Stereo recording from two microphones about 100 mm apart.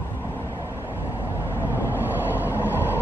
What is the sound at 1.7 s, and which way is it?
Vehicle, 20° right (ahead or behind).